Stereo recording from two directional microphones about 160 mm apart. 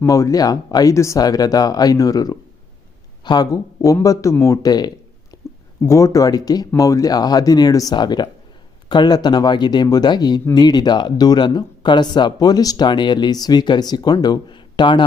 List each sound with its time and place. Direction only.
0.0 s speech: 20° left (ahead or behind)
5.3 s a sound: 20° left (ahead or behind)
5.8 s speech: 20° left (ahead or behind)